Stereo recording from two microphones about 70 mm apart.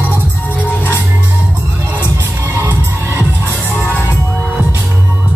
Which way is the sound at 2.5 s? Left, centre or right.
Right.